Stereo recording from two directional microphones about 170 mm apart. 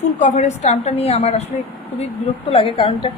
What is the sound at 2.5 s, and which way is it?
Speech, 30° left (ahead or behind).